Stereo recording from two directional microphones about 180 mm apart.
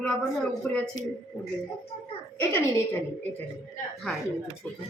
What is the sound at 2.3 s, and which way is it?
Speech, 10° left (ahead or behind).